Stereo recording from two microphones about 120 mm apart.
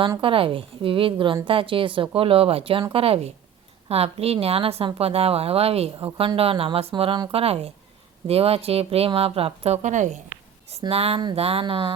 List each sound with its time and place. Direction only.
0.2 s a woman's voice: 45° right (ahead or behind)
7.4 s a woman's voice: 55° right (ahead or behind); by 10.2 s 90° right
10.7 s a woman's voice: 55° right (ahead or behind)